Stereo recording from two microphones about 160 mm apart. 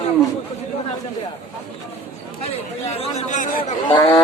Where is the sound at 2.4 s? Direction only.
40° left (ahead or behind).